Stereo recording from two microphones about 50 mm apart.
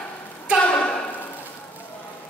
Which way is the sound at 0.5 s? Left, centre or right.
Left.